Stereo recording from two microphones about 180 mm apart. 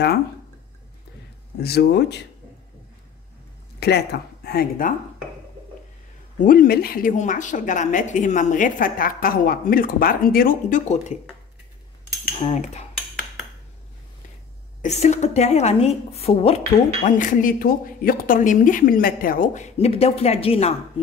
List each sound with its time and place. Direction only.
1.6 s speech: 65° left (ahead or behind)
3.8 s speech: 65° left (ahead or behind)
6.4 s a woman's voice: 50° left (ahead or behind)
12.4 s a woman's voice: 40° left (ahead or behind)
14.8 s a woman's voice: 40° left (ahead or behind)